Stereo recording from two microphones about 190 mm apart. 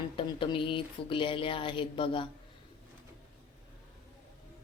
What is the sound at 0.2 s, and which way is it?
Speech, 25° left (ahead or behind).